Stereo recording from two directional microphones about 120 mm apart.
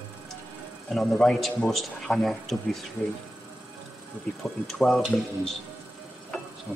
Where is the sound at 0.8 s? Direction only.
Centre (ahead or behind).